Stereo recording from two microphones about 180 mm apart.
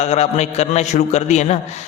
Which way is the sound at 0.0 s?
40° left (ahead or behind).